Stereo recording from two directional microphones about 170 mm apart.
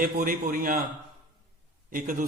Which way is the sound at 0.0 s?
55° right (ahead or behind).